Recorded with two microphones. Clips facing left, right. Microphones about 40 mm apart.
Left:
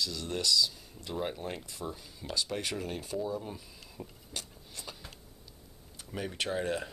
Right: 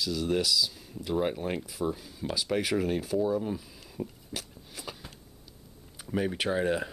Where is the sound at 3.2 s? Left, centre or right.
Centre.